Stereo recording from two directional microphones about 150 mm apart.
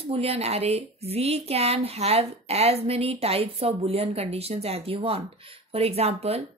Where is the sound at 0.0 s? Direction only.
40° right (ahead or behind).